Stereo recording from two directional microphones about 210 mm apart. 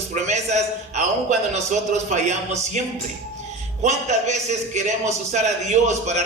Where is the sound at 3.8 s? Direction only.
35° right (ahead or behind).